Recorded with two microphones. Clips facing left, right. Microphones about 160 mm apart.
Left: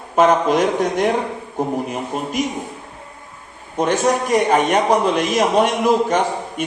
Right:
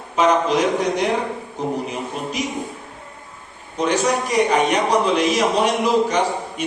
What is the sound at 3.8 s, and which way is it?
A man's voice, 50° left (ahead or behind).